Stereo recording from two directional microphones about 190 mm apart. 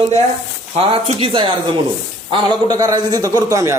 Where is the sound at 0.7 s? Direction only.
30° right (ahead or behind).